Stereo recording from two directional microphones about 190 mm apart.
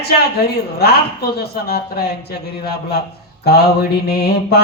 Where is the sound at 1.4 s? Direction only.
55° left (ahead or behind).